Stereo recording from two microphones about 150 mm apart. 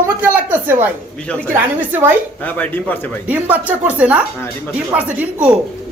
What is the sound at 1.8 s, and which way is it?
Speech, 10° right (ahead or behind).